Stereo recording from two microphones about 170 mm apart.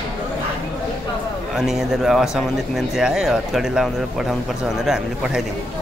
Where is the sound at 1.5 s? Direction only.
Centre (ahead or behind).